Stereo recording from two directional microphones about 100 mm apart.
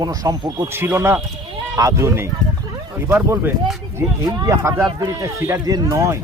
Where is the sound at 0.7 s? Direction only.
25° right (ahead or behind).